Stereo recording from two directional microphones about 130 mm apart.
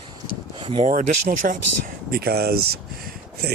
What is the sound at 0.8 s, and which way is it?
Speech, 80° right.